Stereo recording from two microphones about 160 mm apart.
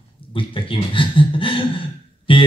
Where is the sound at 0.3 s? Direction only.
35° left (ahead or behind).